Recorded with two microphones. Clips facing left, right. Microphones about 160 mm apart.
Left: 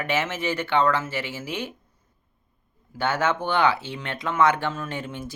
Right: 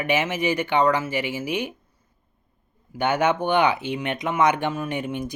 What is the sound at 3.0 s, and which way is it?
Speech, 15° right (ahead or behind).